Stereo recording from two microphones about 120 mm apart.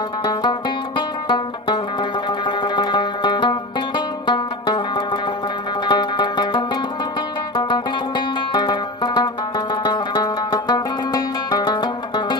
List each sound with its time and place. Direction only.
0.2 s music: 35° left (ahead or behind)